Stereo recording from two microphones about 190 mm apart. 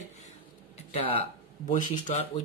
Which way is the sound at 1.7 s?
40° left (ahead or behind).